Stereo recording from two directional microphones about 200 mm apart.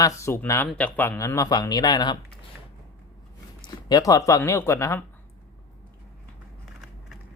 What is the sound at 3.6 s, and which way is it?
Speech, 20° left (ahead or behind).